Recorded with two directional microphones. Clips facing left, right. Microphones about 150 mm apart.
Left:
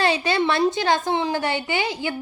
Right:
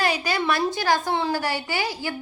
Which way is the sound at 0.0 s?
25° left (ahead or behind).